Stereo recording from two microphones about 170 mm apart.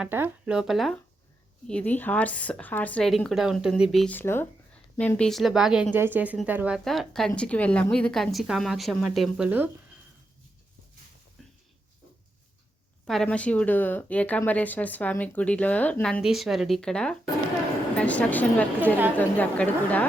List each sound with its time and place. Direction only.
0.0 s a woman's voice: 10° right (ahead or behind)
11.4 s a sound: centre (ahead or behind)
13.1 s a woman's voice: 5° left (ahead or behind)